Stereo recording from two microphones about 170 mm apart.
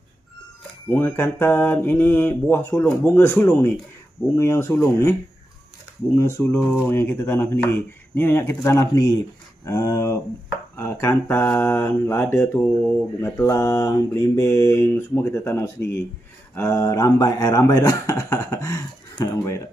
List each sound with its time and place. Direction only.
0.8 s speech: 10° left (ahead or behind)
6.1 s speech: 15° left (ahead or behind)